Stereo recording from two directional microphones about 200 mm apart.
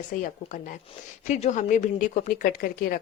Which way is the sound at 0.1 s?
40° left (ahead or behind).